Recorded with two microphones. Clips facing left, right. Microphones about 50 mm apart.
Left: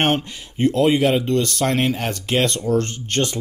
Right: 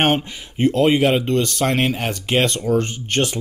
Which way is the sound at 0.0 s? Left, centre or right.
Centre.